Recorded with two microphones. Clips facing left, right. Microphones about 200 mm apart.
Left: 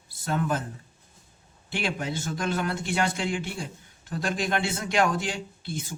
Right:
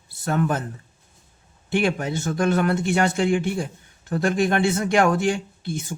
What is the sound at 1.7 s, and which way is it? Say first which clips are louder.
Speech: right 7 dB; 55° right (ahead or behind).